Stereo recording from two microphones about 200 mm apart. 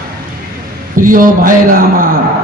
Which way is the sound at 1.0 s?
45° right (ahead or behind).